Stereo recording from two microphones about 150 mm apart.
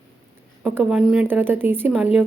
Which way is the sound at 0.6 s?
10° right (ahead or behind).